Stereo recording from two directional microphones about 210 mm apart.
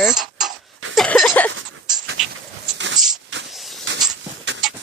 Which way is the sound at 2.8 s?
65° right (ahead or behind).